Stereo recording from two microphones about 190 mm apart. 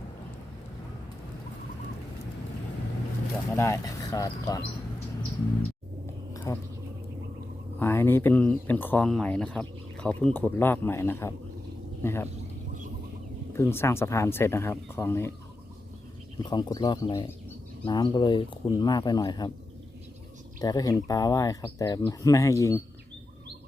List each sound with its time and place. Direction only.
3.6 s speech: 15° left (ahead or behind)
6.3 s a sound: 15° left (ahead or behind)
7.8 s speech: 10° left (ahead or behind)
13.5 s speech: 10° left (ahead or behind)
16.4 s speech: 20° left (ahead or behind)
20.6 s speech: 20° left (ahead or behind)